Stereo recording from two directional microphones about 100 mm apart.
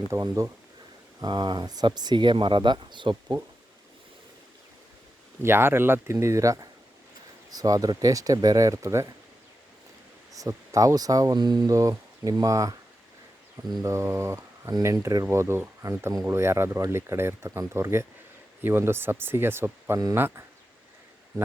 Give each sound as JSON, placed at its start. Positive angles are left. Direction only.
{"t": 0.1, "sound": "speech", "side_deg": -30}
{"t": 1.2, "sound": "speech", "side_deg": -45}
{"t": 5.4, "sound": "speech", "side_deg": -25}
{"t": 10.3, "sound": "speech", "side_deg": -35}
{"t": 11.7, "sound": "speech", "side_deg": -35}
{"t": 13.8, "sound": "speech", "side_deg": -30}